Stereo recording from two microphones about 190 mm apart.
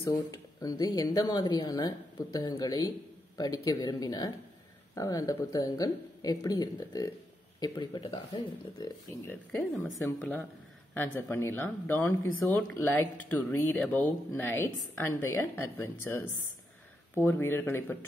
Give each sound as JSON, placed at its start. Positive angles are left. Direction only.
{"t": 0.0, "sound": "speech", "side_deg": 20}
{"t": 9.1, "sound": "speech", "side_deg": 10}